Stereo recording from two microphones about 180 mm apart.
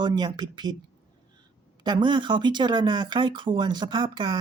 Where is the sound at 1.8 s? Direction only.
25° right (ahead or behind).